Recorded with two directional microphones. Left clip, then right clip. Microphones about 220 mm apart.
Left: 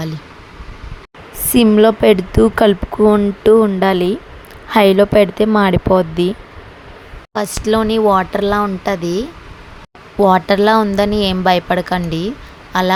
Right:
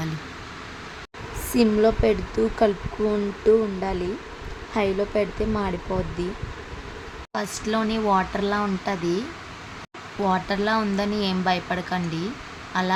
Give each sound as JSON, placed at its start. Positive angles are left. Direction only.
{"t": 1.5, "sound": "speech", "side_deg": 35}
{"t": 7.3, "sound": "speech", "side_deg": 35}